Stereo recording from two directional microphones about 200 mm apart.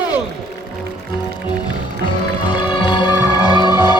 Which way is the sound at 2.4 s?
20° left (ahead or behind).